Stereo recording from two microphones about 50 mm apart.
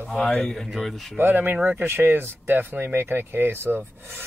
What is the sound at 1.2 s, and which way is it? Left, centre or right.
Speech, right.